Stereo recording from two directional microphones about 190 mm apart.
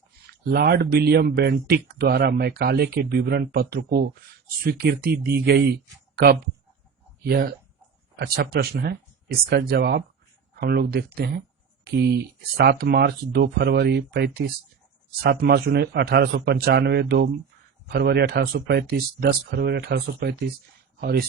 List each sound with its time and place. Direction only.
0.5 s speech: 55° right (ahead or behind)